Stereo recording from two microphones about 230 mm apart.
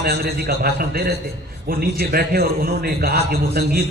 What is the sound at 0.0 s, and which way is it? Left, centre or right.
A man's voice, right.